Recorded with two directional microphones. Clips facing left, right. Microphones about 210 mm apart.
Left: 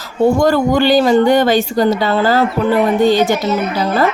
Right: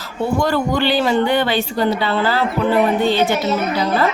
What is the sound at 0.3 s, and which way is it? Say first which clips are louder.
A woman's voice: left 5 dB; 45° left (ahead or behind).